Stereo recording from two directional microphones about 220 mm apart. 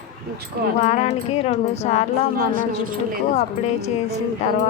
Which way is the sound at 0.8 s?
30° left (ahead or behind).